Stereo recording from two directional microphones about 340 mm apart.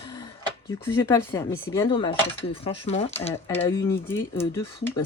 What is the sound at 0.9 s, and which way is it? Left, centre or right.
Speech, centre.